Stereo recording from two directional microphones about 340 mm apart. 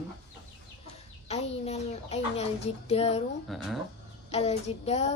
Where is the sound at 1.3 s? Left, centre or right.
Centre.